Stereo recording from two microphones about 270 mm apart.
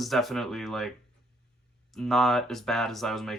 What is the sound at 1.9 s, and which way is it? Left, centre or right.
Speech, centre.